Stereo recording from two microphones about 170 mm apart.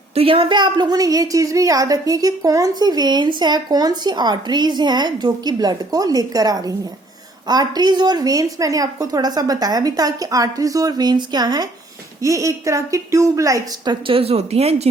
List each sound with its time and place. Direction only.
0.1 s a woman's voice: 35° right (ahead or behind)